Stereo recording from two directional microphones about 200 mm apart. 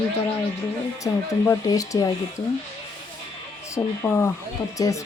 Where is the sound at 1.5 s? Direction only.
15° left (ahead or behind).